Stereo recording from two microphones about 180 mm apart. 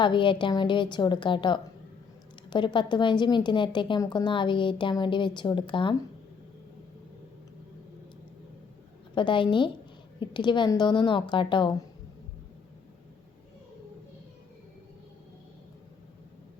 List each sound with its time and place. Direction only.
0.0 s a woman's voice: 25° left (ahead or behind)
9.1 s a woman's voice: 25° left (ahead or behind)